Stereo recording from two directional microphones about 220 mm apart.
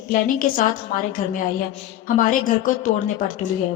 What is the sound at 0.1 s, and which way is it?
Speech, 35° left (ahead or behind).